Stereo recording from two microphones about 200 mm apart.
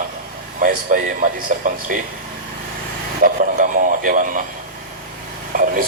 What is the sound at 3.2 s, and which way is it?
Radio, 40° right (ahead or behind).